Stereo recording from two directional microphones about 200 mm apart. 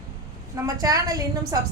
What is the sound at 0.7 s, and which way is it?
Speech, 20° right (ahead or behind).